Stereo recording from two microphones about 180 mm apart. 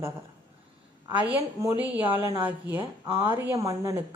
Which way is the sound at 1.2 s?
15° right (ahead or behind).